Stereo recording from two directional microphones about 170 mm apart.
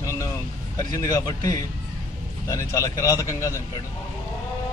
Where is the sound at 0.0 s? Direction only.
20° left (ahead or behind).